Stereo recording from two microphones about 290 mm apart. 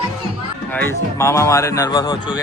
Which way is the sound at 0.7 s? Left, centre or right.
Centre.